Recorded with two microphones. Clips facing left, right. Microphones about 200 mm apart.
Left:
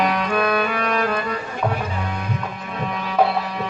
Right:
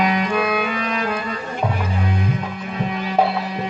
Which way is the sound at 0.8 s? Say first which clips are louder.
Left 2 dB; 55° left (ahead or behind).